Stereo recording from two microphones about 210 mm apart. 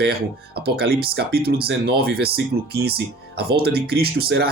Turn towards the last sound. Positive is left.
turn(degrees=-50)  # may be behind; listen again after turning